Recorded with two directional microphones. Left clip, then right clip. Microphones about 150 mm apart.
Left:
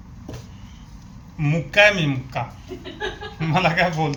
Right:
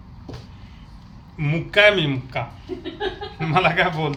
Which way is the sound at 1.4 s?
30° right (ahead or behind).